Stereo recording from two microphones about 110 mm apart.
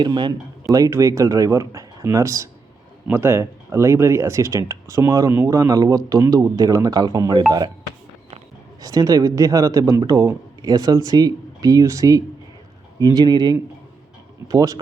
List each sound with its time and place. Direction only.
0.0 s speech: 40° right (ahead or behind)
8.8 s speech: 35° right (ahead or behind)